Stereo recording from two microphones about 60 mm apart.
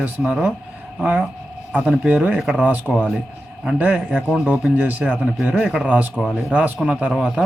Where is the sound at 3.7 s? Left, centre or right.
Right.